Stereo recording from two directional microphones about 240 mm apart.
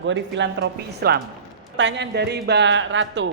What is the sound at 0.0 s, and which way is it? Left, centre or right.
Speech, right.